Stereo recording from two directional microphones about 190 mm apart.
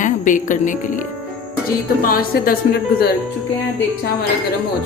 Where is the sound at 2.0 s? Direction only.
50° left (ahead or behind).